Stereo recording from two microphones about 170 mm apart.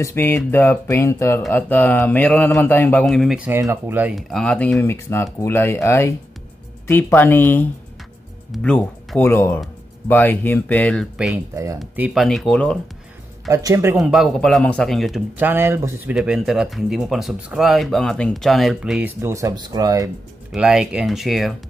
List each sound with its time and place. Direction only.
0.0 s a man's voice: 15° left (ahead or behind); by 4.1 s 10° right (ahead or behind)
4.1 s speech: centre (ahead or behind)
4.7 s a man's voice: 15° left (ahead or behind)
11.5 s speech: 20° right (ahead or behind)
11.9 s speech: 5° right (ahead or behind)
13.5 s speech: 20° right (ahead or behind)
13.9 s speech: centre (ahead or behind); by 20.1 s 20° right (ahead or behind)
20.5 s speech: 5° right (ahead or behind)